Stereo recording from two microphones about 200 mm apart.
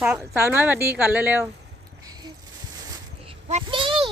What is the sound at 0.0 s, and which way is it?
A woman's voice, 5° right (ahead or behind).